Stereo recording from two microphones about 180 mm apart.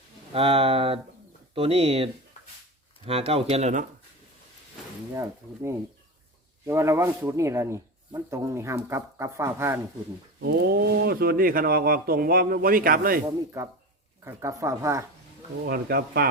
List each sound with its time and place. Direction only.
0.3 s speech: 30° right (ahead or behind)
3.1 s speech: 35° right (ahead or behind)
5.1 s speech: 15° right (ahead or behind)
10.4 s speech: 60° right (ahead or behind)
13.2 s speech: 15° right (ahead or behind)
15.6 s speech: 60° right (ahead or behind)